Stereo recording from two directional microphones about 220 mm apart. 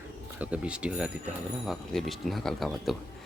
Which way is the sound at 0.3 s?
5° right (ahead or behind).